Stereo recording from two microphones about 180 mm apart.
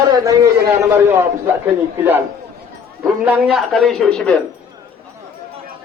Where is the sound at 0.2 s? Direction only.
20° right (ahead or behind).